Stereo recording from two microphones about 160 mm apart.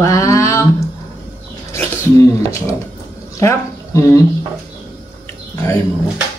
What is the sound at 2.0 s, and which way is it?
Speech, 20° left (ahead or behind).